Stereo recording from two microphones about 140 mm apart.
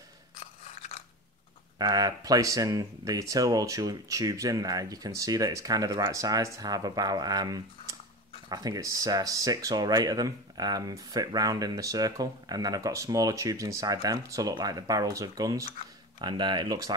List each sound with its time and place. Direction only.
1.8 s speech: 30° right (ahead or behind)